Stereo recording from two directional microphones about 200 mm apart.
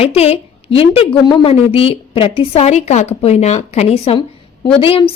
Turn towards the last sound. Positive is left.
turn(degrees=30)  # may be behind; listen again after turning